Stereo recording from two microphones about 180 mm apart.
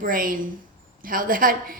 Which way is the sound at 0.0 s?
50° right (ahead or behind).